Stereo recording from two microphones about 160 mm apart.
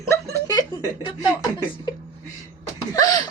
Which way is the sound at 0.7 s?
25° left (ahead or behind).